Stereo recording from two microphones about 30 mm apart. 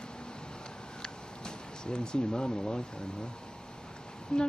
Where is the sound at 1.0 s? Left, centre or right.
Left.